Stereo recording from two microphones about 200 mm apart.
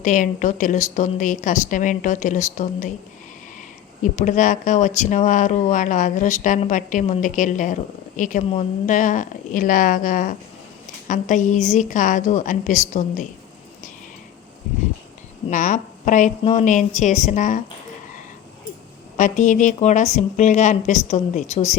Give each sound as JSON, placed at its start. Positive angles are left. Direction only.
{"t": 0.0, "sound": "speech", "side_deg": 40}
{"t": 4.0, "sound": "speech", "side_deg": 40}
{"t": 15.4, "sound": "speech", "side_deg": 40}
{"t": 19.1, "sound": "speech", "side_deg": 40}